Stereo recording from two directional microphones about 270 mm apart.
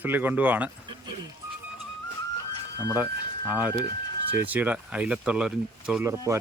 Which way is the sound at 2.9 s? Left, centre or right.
Centre.